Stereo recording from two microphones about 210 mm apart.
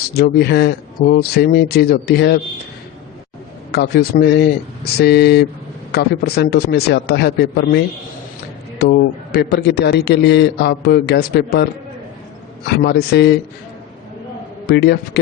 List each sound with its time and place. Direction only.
0.1 s a man's voice: 50° left (ahead or behind)
3.7 s a man's voice: 50° left (ahead or behind)
8.8 s a man's voice: 50° left (ahead or behind)
12.6 s a man's voice: 50° left (ahead or behind)
14.7 s a man's voice: 50° left (ahead or behind)